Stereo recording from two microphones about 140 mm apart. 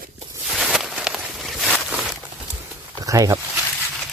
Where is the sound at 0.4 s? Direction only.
Centre (ahead or behind).